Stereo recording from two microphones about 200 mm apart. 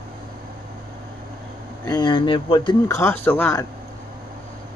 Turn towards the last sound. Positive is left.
turn(degrees=10)  # may be behind; listen again after turning